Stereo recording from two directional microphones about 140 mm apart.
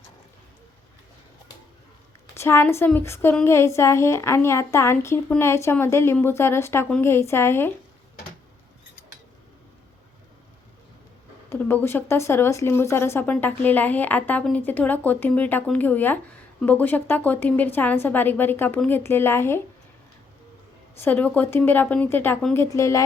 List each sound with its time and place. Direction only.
2.3 s a woman's voice: 20° left (ahead or behind)
11.4 s speech: 15° left (ahead or behind)
21.0 s a woman's voice: 15° left (ahead or behind)